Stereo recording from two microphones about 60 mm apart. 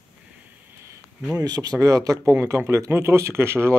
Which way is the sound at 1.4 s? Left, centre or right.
Right.